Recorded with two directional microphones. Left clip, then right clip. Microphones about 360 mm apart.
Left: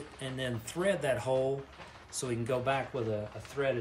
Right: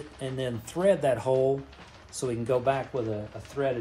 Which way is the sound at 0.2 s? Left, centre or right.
Centre.